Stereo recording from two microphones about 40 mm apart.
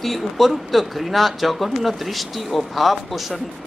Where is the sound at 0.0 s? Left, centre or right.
Centre.